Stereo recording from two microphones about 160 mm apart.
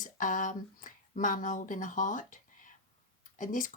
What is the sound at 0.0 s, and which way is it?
Speech, 55° left (ahead or behind).